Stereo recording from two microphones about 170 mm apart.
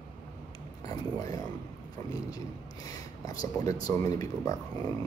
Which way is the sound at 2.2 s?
20° left (ahead or behind).